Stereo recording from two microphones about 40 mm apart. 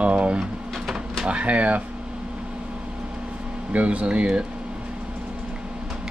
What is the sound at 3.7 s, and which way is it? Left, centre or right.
Speech, right.